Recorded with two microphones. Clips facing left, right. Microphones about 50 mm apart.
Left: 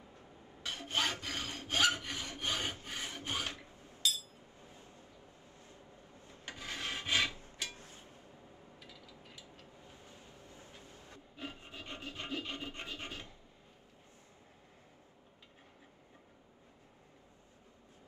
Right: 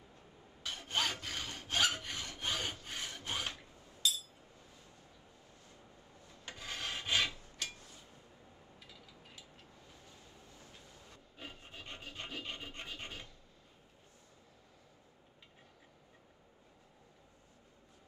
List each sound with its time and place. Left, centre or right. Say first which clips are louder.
0.7 s filing: left 1 dB; left
1.2 s sawing: left 2 dB; centre
1.5 s rub: left 2 dB; left
1.9 s sawing: left 4 dB; left
2.1 s rub: left 1 dB; left
2.9 s rub: left 1 dB; centre
3.4 s filing: left 1 dB; left
4.6 s a sound: left 3 dB; left
5.7 s vehicle: left 2 dB; left
6.5 s filing: left 1 dB; left
7.6 s a sound: left 1 dB; left
9.8 s rub: left 3 dB; left